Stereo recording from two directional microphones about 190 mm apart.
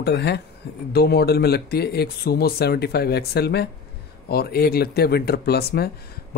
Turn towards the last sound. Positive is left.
turn(degrees=55)  # may be behind; listen again after turning